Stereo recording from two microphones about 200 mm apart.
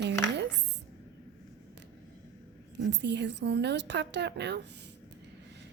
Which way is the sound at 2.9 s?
60° right (ahead or behind).